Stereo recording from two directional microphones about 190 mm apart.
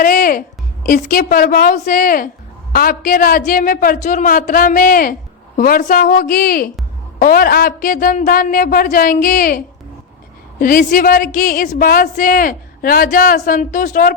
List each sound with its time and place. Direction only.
0.0 s music: 45° left (ahead or behind)
0.9 s a woman's voice: 45° left (ahead or behind)